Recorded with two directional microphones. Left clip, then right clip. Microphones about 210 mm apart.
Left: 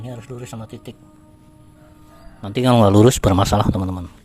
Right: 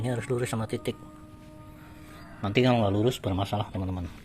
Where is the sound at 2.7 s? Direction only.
50° left (ahead or behind).